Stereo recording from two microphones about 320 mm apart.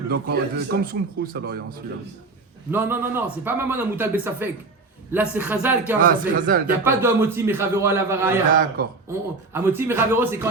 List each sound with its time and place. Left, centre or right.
0.1 s speech: right
2.7 s a man's voice: centre
6.3 s speech: right
6.8 s a man's voice: centre
8.5 s speech: right
9.0 s a man's voice: centre